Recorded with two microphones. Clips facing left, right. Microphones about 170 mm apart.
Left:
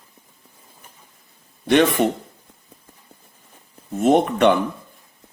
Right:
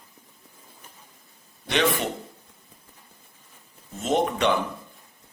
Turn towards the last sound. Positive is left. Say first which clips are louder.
# left 7 dB
turn(degrees=55)  # may be behind; listen again after turning